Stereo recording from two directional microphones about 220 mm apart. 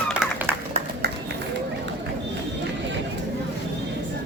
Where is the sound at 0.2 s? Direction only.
10° right (ahead or behind).